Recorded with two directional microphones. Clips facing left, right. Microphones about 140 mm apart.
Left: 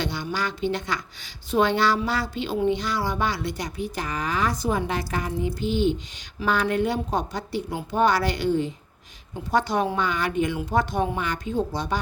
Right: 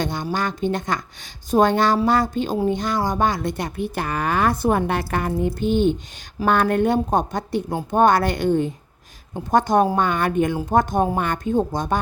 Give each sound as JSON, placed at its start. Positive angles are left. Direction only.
{"t": 0.0, "sound": "speech", "side_deg": -45}